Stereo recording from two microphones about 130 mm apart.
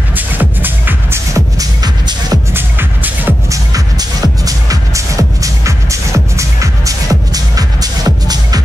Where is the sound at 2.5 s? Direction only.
15° right (ahead or behind).